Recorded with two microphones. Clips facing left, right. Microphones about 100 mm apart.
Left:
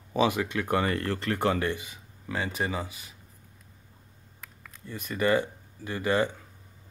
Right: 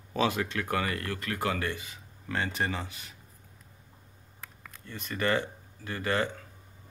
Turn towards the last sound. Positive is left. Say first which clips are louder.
# left 3 dB
turn(degrees=15)  # may be behind; listen again after turning